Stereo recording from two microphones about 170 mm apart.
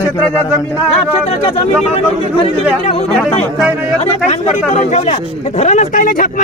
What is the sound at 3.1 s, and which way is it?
Speech, centre (ahead or behind).